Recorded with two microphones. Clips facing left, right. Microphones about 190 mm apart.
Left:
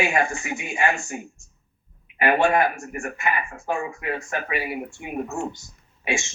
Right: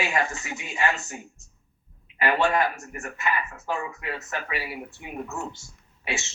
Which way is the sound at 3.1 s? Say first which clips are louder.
Left 1 dB; 55° left (ahead or behind).